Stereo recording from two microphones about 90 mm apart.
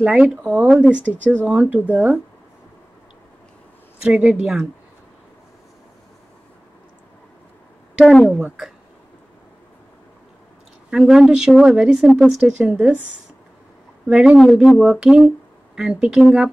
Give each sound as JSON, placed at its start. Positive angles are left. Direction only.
{"t": 0.0, "sound": "speech", "side_deg": -15}
{"t": 4.0, "sound": "speech", "side_deg": -15}
{"t": 10.9, "sound": "speech", "side_deg": -5}
{"t": 14.0, "sound": "speech", "side_deg": -10}
{"t": 14.4, "sound": "speech", "side_deg": 0}